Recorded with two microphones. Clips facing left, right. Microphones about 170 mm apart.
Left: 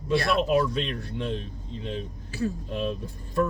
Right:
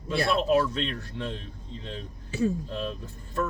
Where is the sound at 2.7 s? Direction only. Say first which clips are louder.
Left 4 dB; 15° left (ahead or behind).